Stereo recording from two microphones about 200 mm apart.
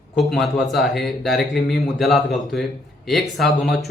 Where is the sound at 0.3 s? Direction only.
Centre (ahead or behind).